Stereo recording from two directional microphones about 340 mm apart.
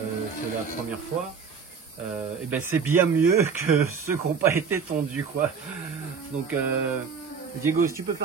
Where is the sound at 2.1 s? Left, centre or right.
Centre.